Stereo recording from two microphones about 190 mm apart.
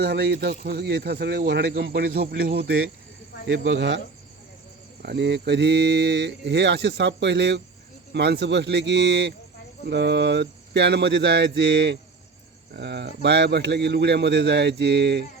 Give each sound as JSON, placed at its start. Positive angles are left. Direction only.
{"t": 0.0, "sound": "speech", "side_deg": -60}
{"t": 3.4, "sound": "speech", "side_deg": -70}
{"t": 5.0, "sound": "speech", "side_deg": -65}